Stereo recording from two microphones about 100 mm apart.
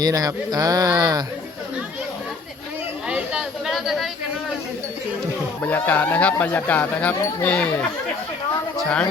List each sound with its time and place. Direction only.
0.0 s speech: 40° right (ahead or behind)
3.7 s a sound: centre (ahead or behind)
5.6 s speech: 15° left (ahead or behind)